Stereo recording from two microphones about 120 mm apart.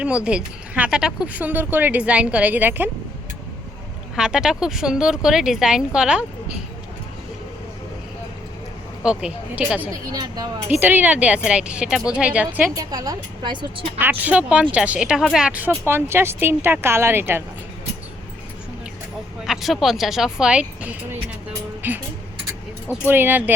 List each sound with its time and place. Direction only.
0.0 s speech: 10° right (ahead or behind)
4.1 s speech: 5° right (ahead or behind)
9.0 s speech: 10° right (ahead or behind)
10.1 s a woman's voice: 35° right (ahead or behind)
10.7 s speech: 15° right (ahead or behind)
12.7 s a woman's voice: 30° right (ahead or behind)
14.0 s speech: 15° right (ahead or behind)
19.5 s speech: centre (ahead or behind)
21.8 s vehicle: 15° right (ahead or behind)
23.0 s speech: 15° right (ahead or behind)